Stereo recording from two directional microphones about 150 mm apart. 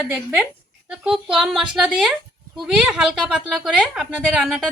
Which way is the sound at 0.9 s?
5° right (ahead or behind).